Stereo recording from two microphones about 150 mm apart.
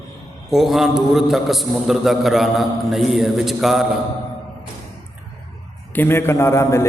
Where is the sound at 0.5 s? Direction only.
Centre (ahead or behind).